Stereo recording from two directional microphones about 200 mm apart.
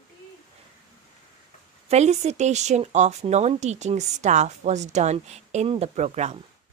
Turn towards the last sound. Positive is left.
turn(degrees=-35)  # may be behind; listen again after turning